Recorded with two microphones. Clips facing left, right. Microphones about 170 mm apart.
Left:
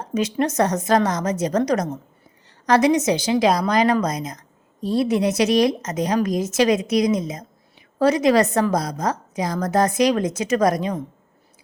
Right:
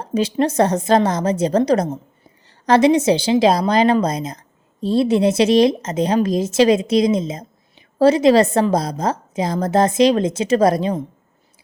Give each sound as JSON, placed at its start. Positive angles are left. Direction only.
{"t": 0.0, "sound": "a woman's voice", "side_deg": -30}